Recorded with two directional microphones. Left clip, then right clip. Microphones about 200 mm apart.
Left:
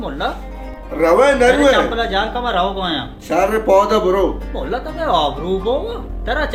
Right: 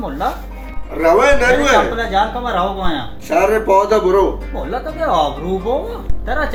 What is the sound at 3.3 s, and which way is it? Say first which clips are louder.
Speech: right 1 dB; 60° left (ahead or behind).